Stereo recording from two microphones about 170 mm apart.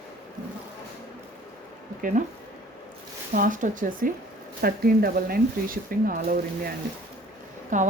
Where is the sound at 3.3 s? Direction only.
50° right (ahead or behind).